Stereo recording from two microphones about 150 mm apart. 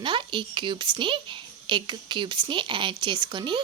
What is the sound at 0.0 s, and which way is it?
A woman's voice, 35° right (ahead or behind).